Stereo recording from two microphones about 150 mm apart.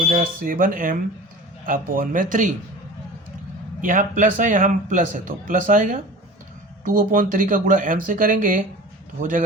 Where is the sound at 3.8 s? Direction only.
60° right (ahead or behind).